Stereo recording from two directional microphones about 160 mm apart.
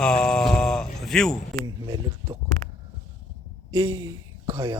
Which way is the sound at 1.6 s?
20° right (ahead or behind).